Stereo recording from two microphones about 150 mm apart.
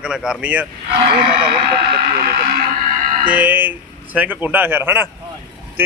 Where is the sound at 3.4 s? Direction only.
10° right (ahead or behind).